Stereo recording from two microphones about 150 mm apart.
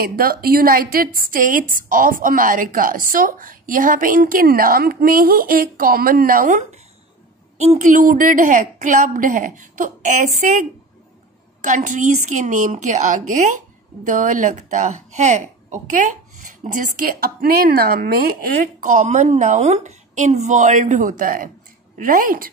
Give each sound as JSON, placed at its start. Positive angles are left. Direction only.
{"t": 0.0, "sound": "a woman's voice", "side_deg": -80}
{"t": 7.5, "sound": "a woman's voice", "side_deg": -45}
{"t": 11.6, "sound": "a woman's voice", "side_deg": -55}
{"t": 18.9, "sound": "a woman's voice", "side_deg": -55}